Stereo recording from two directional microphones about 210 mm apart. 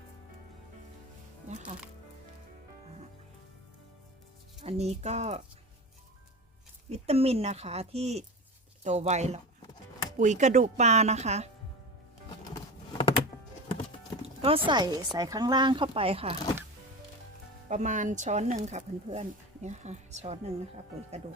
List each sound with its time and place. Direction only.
1.5 s speech: 35° right (ahead or behind)
4.6 s speech: 30° right (ahead or behind)
6.9 s speech: 30° right (ahead or behind)
12.5 s a sound: 25° left (ahead or behind)
14.2 s music: 25° right (ahead or behind)
14.7 s speech: 20° right (ahead or behind)
17.7 s speech: 35° right (ahead or behind)